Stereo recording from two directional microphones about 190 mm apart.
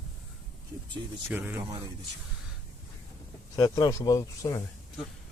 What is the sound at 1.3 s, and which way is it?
Speech, 10° right (ahead or behind).